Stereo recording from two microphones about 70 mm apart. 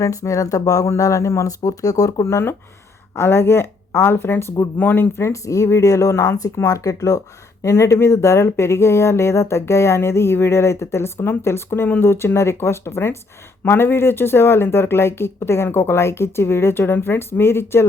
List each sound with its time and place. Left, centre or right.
0.0 s speech: left
2.2 s speech: left